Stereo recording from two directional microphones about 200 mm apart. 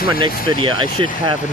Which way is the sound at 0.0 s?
45° left (ahead or behind).